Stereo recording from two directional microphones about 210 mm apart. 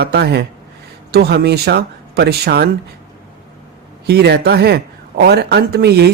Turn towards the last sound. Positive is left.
turn(degrees=-50)  # may be behind; listen again after turning